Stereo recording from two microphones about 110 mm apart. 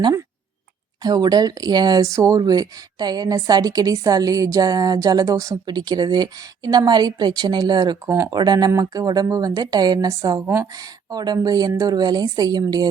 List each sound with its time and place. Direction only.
1.0 s speech: 35° right (ahead or behind)
8.0 s speech: 25° right (ahead or behind)
8.4 s speech: 40° right (ahead or behind)